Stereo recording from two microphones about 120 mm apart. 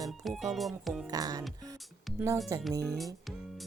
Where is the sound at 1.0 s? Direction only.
30° right (ahead or behind).